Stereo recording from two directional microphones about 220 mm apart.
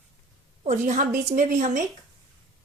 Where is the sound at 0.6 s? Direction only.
30° right (ahead or behind).